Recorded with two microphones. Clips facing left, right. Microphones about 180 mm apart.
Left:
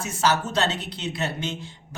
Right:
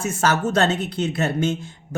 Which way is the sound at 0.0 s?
50° right (ahead or behind).